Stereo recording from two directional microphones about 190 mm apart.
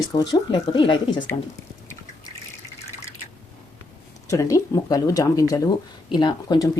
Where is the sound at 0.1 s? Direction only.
20° left (ahead or behind).